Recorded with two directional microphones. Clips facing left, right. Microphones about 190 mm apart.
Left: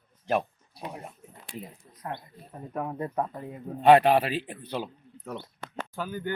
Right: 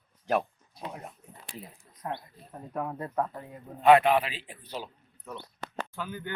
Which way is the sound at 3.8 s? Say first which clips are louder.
Left 2 dB; 35° left (ahead or behind).